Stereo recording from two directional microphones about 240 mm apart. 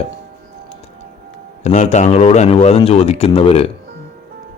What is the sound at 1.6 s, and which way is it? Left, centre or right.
A man's voice, left.